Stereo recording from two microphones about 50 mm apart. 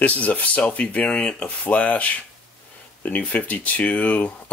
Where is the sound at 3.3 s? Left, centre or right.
Left.